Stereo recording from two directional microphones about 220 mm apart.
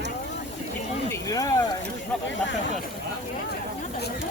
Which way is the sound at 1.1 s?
15° left (ahead or behind).